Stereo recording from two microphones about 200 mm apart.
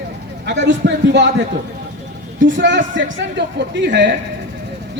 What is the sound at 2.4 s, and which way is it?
A woman's voice, 65° right (ahead or behind).